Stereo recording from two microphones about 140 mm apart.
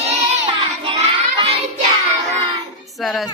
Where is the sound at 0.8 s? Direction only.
40° right (ahead or behind).